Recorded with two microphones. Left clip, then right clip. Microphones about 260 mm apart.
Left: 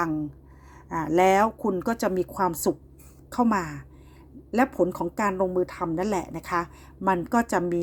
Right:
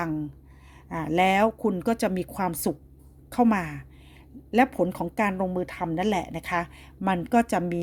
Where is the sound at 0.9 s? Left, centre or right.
Right.